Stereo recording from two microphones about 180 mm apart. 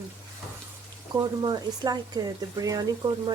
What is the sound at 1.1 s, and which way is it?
Speech, 25° right (ahead or behind).